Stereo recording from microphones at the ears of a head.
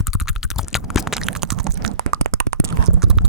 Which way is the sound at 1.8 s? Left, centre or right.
Right.